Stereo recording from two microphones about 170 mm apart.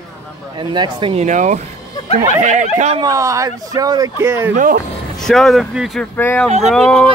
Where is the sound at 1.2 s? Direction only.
45° right (ahead or behind).